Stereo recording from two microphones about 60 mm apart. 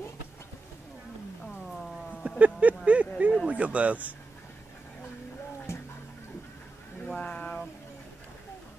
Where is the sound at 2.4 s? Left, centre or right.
Right.